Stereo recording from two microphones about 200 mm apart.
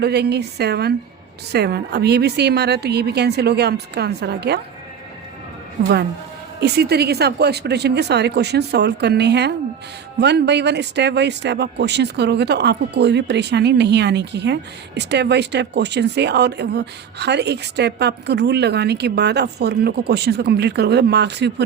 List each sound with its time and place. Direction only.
0.0 s speech: 55° right (ahead or behind)
6.6 s speech: 55° right (ahead or behind)